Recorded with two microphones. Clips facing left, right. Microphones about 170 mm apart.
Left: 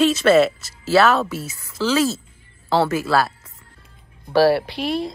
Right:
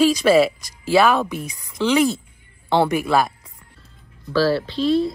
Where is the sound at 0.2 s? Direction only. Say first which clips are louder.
Even; 10° right (ahead or behind).